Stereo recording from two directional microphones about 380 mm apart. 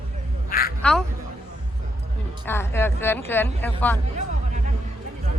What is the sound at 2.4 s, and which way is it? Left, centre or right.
Speech, centre.